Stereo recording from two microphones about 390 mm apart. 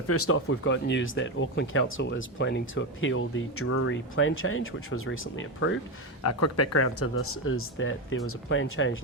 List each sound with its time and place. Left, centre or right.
0.1 s speech: left